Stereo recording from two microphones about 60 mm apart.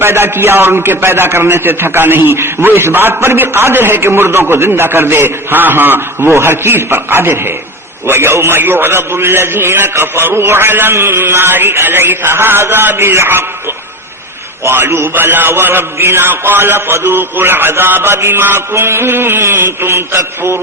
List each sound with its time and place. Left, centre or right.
0.0 s a man's voice: right